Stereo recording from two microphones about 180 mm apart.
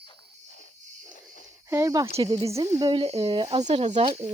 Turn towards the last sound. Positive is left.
turn(degrees=-35)  # may be behind; listen again after turning